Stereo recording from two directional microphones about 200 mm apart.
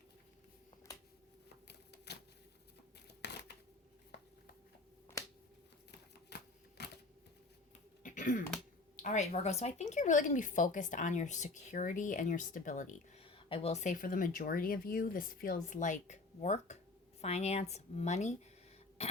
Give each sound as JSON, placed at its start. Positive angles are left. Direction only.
{"t": 1.6, "sound": "typewriter", "side_deg": 55}
{"t": 3.2, "sound": "a sound", "side_deg": 60}
{"t": 6.8, "sound": "typewriter", "side_deg": 55}
{"t": 8.0, "sound": "a sound", "side_deg": 40}
{"t": 9.0, "sound": "speech", "side_deg": 35}
{"t": 13.2, "sound": "speech", "side_deg": 25}